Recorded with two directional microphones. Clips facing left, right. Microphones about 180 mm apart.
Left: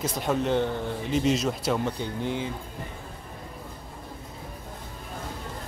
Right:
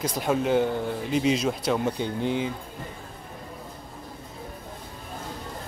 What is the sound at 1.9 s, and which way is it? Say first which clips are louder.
Speech: right 3 dB; 20° right (ahead or behind).